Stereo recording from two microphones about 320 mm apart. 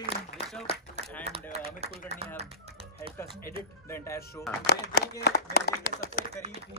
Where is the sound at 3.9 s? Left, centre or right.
Centre.